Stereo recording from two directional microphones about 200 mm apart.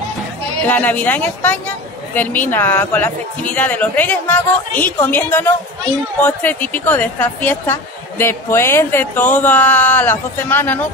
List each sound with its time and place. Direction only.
0.7 s speech: 10° left (ahead or behind)